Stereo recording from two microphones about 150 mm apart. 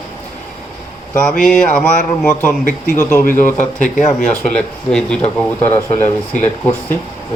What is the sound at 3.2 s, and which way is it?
Speech, 65° left (ahead or behind).